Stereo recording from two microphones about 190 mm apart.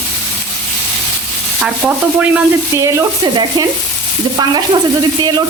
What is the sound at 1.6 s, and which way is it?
Frying, 5° right (ahead or behind).